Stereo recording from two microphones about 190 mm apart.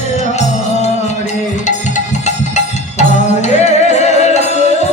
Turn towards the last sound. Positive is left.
turn(degrees=35)  # may be behind; listen again after turning